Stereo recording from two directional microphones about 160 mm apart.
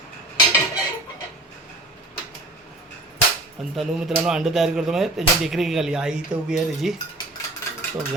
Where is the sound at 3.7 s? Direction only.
Centre (ahead or behind).